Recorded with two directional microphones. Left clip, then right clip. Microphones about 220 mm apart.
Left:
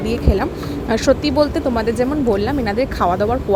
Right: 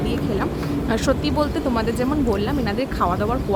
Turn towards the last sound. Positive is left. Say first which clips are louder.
# left 5 dB
turn(degrees=25)  # may be behind; listen again after turning